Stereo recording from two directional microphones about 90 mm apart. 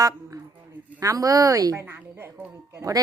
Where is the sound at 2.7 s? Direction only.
40° right (ahead or behind).